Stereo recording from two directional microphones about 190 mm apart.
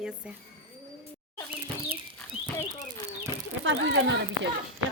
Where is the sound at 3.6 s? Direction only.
75° right (ahead or behind).